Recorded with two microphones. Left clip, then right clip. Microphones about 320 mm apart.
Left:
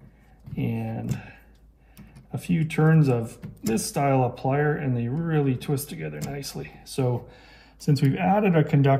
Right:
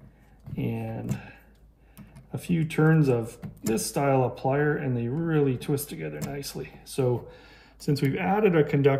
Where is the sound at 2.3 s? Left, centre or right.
Centre.